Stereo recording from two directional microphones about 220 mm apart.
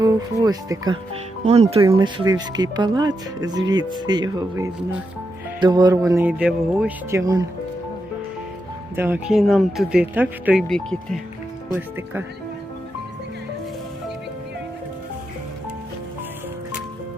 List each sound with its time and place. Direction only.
0.0 s speech: 15° right (ahead or behind)
1.5 s speech: 30° right (ahead or behind)
1.8 s speech: 15° right (ahead or behind)
9.0 s speech: 10° right (ahead or behind)
11.7 s speech: 10° right (ahead or behind)